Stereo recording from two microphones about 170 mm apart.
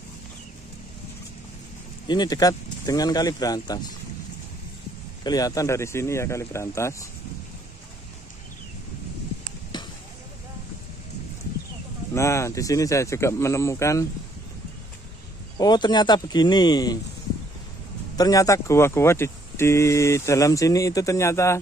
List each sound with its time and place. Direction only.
2.0 s speech: 25° left (ahead or behind)
5.2 s speech: 20° left (ahead or behind)
12.1 s speech: 15° left (ahead or behind)
15.5 s speech: 25° left (ahead or behind)
18.1 s speech: 20° left (ahead or behind)